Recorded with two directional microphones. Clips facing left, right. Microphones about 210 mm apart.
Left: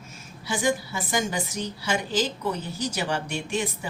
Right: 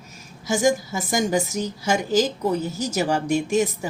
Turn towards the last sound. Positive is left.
turn(degrees=-45)  # may be behind; listen again after turning